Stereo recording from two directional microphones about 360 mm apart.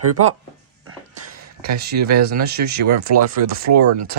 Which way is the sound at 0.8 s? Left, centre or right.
Right.